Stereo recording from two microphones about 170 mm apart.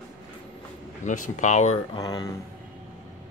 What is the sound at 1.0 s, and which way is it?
Speech, 45° left (ahead or behind).